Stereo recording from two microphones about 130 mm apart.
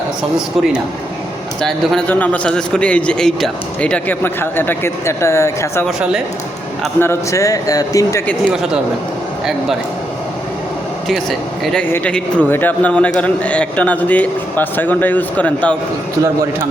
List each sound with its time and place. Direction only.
1.6 s a man's voice: 5° left (ahead or behind); by 5.8 s 20° left (ahead or behind)
7.0 s speech: 20° left (ahead or behind)
11.1 s speech: centre (ahead or behind)
11.9 s a man's voice: 10° left (ahead or behind)